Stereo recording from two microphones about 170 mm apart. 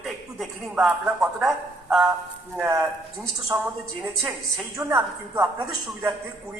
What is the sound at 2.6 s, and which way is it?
Speech, 15° right (ahead or behind).